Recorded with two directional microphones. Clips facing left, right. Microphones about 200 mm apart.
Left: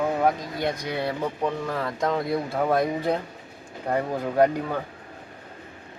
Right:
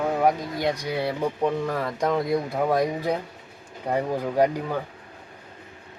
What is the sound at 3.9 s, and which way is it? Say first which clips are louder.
Speech: right 1 dB; 10° right (ahead or behind).